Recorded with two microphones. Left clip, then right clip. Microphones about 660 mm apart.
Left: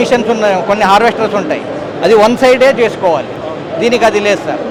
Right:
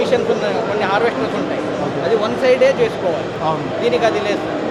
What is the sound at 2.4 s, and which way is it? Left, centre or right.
A man's voice, left.